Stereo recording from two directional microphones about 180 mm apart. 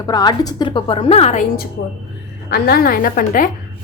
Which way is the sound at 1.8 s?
65° left (ahead or behind).